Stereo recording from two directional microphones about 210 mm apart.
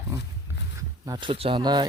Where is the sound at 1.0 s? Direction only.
20° right (ahead or behind).